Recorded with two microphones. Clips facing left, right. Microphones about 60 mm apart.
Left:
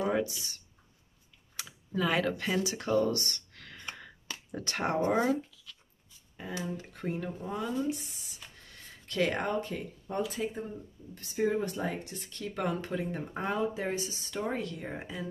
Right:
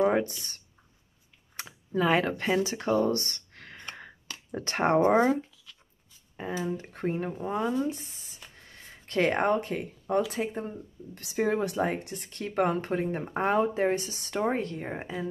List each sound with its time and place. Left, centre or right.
0.0 s speech: right
2.0 s speech: right
6.3 s speech: right
8.6 s a sound: right
9.1 s speech: right
11.1 s speech: right
11.9 s speech: right
14.4 s speech: right